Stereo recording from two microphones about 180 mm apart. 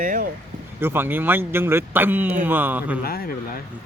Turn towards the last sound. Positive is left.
turn(degrees=55)  # may be behind; listen again after turning